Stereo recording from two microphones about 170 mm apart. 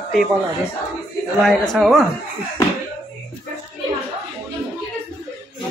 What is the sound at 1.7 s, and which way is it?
Speech, centre (ahead or behind).